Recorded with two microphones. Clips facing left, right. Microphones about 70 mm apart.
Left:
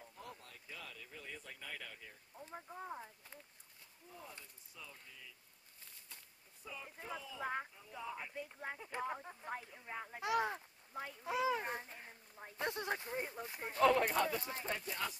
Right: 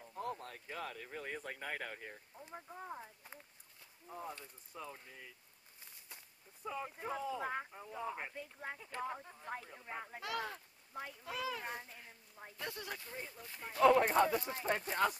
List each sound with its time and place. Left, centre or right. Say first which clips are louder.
0.1 s a sound: right 15 dB; right
2.5 s speech: even; centre
4.1 s speech: right 8 dB; right
6.6 s speech: right 8 dB; right
7.4 s speech: even; centre
8.0 s speech: right 3 dB; right
8.4 s speech: left 1 dB; centre
8.7 s speech: left 1 dB; centre
9.2 s a sound: left 2 dB; centre
10.2 s speech: left 6 dB; left
10.9 s speech: even; centre
11.2 s speech: left 6 dB; left
13.9 s speech: right 4 dB; right
14.8 s speech: right 8 dB; right